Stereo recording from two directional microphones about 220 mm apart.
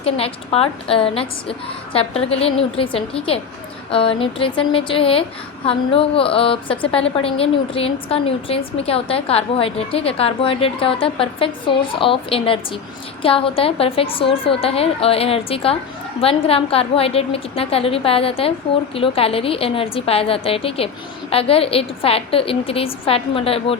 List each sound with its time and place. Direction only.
0.0 s a woman's voice: 25° left (ahead or behind)